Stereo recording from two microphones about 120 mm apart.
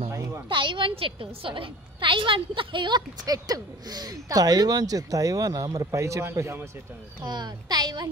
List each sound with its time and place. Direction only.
0.1 s a sound: 25° right (ahead or behind)
0.5 s a woman's voice: 45° right (ahead or behind); by 6.7 s 25° right (ahead or behind)
7.2 s a woman's voice: 35° right (ahead or behind)